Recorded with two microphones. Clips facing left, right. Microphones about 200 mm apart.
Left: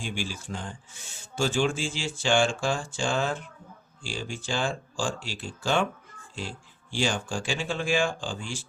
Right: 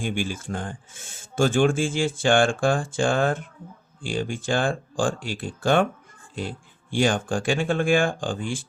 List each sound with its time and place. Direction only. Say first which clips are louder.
0.0 s speech: right 6 dB; 55° right (ahead or behind)